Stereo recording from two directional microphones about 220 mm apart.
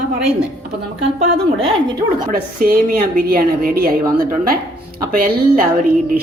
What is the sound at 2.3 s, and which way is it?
A woman's voice, 40° right (ahead or behind).